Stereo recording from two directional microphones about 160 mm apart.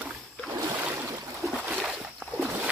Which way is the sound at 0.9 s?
20° right (ahead or behind).